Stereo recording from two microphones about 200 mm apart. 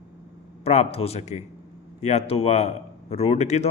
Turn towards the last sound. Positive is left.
turn(degrees=35)  # may be behind; listen again after turning